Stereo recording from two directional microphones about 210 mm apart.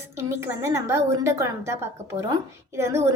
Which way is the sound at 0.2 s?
10° right (ahead or behind).